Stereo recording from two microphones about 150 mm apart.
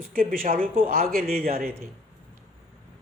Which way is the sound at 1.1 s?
85° right.